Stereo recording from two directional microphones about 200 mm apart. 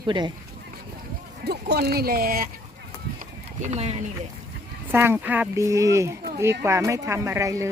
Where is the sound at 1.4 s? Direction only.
55° right (ahead or behind).